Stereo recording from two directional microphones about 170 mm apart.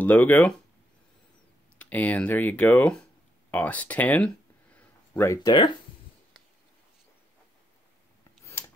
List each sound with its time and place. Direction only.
0.0 s speech: 10° left (ahead or behind)
1.8 s speech: 10° left (ahead or behind)
4.7 s a sound: 15° left (ahead or behind)
8.5 s scissors: 15° left (ahead or behind)